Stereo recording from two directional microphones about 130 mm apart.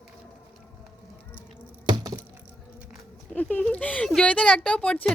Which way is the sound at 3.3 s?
15° left (ahead or behind).